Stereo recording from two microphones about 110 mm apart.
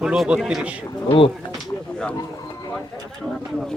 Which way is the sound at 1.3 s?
Centre (ahead or behind).